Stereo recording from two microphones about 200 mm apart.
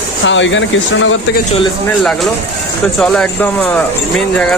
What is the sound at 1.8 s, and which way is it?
Speech, 5° left (ahead or behind).